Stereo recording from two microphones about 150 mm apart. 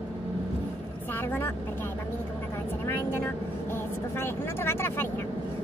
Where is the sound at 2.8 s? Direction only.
15° left (ahead or behind).